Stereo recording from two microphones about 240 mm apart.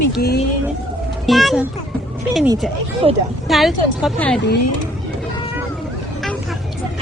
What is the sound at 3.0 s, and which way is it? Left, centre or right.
Speech, right.